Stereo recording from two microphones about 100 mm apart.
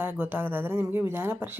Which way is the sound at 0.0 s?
20° right (ahead or behind).